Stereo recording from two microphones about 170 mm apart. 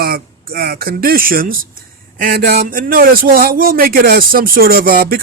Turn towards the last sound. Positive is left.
turn(degrees=-55)  # may be behind; listen again after turning